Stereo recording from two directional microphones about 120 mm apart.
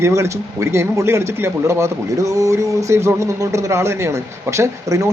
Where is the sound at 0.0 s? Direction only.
25° right (ahead or behind).